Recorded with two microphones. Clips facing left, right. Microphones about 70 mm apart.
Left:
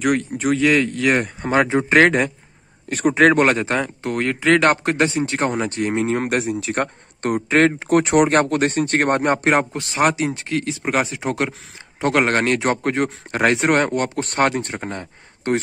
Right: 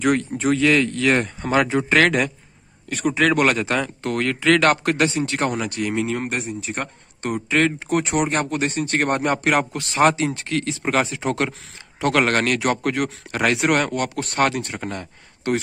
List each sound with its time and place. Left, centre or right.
0.0 s speech: centre
1.5 s speech: left
2.9 s speech: left
6.2 s speech: left
6.8 s speech: left